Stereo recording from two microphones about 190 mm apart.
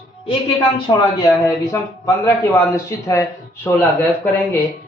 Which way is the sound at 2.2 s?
15° left (ahead or behind).